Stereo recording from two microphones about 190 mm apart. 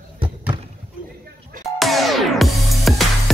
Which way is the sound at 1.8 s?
Centre (ahead or behind).